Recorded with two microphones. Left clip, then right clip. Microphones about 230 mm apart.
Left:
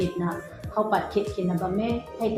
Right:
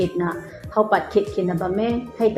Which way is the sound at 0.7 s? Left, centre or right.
Right.